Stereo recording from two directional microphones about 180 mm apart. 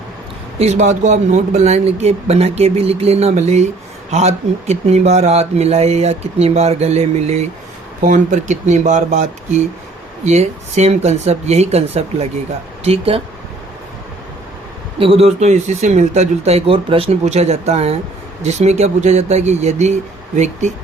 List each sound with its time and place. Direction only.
0.6 s speech: 40° right (ahead or behind)
14.9 s speech: 30° right (ahead or behind)